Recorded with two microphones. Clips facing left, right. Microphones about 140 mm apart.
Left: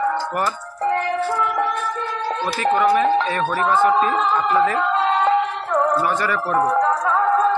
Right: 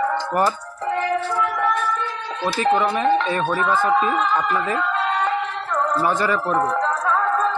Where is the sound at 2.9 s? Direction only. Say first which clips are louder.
Left 2 dB; 25° right (ahead or behind).